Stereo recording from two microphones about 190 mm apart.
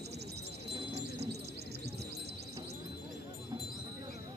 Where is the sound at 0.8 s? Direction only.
35° right (ahead or behind).